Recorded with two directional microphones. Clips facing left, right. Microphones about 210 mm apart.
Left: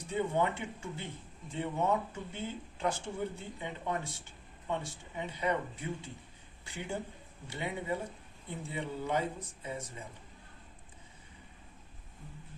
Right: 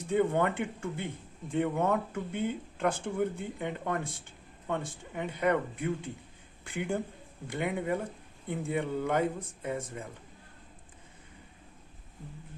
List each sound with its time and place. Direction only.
0.1 s speech: 55° right (ahead or behind)